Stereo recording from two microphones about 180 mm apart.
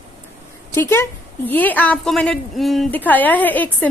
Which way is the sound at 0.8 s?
10° left (ahead or behind).